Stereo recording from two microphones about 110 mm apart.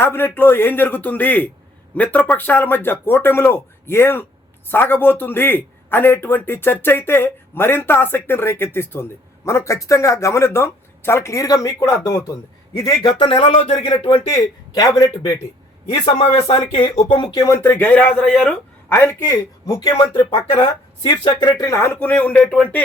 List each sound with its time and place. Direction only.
0.0 s a man's voice: 20° left (ahead or behind); by 13.9 s 55° left (ahead or behind)
14.7 s speech: 40° left (ahead or behind)
15.9 s a man's voice: 65° left (ahead or behind)
17.4 s speech: 25° left (ahead or behind); by 21.5 s 40° left (ahead or behind)
21.6 s speech: 25° left (ahead or behind)